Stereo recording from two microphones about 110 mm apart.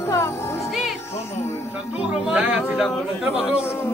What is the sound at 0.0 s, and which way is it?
Music, 25° left (ahead or behind).